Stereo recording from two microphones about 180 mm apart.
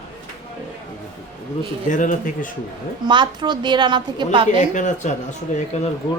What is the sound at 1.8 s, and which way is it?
Speech, 45° left (ahead or behind).